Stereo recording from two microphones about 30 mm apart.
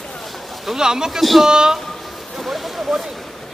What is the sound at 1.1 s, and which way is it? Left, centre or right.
Speech, centre.